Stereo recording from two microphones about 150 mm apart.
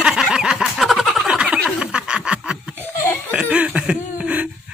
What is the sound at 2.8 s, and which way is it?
Laughter, 15° left (ahead or behind).